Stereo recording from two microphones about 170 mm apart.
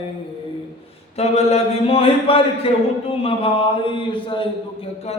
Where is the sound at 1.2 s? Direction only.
40° left (ahead or behind).